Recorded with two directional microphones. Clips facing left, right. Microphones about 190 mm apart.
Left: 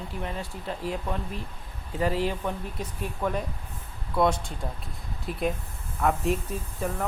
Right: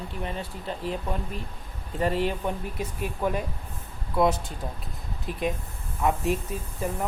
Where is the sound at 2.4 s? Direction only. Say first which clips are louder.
Right 2 dB; 10° right (ahead or behind).